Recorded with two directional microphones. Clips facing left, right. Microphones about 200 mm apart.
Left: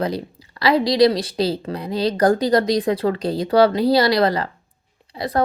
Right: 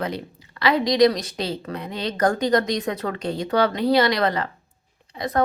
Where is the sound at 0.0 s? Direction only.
35° left (ahead or behind).